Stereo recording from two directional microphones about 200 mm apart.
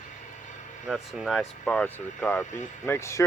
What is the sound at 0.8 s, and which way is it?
Speech, centre (ahead or behind).